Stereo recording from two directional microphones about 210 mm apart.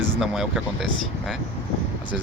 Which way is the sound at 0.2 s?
5° right (ahead or behind).